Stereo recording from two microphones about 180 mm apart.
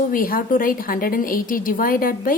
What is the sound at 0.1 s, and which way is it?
A woman's voice, 50° left (ahead or behind).